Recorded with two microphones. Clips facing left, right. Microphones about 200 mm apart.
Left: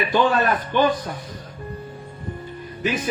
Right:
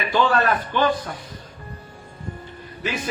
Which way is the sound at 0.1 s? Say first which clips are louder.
Right 1 dB; 15° left (ahead or behind).